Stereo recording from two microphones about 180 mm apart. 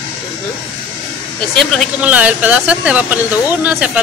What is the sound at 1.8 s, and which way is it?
Speech, 10° right (ahead or behind).